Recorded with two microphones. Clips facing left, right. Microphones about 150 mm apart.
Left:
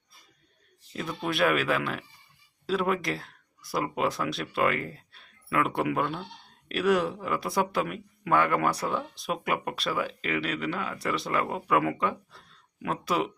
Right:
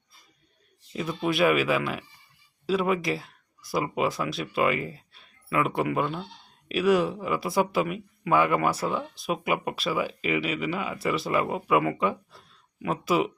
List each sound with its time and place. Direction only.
0.9 s speech: 5° right (ahead or behind)